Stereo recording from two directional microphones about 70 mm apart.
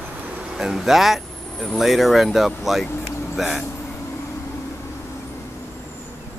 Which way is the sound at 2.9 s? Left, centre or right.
Left.